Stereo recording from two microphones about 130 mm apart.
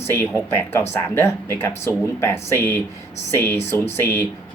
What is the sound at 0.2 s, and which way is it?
Speech, 15° left (ahead or behind).